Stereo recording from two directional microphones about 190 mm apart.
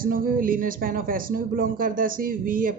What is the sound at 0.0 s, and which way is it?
Speech, 50° right (ahead or behind).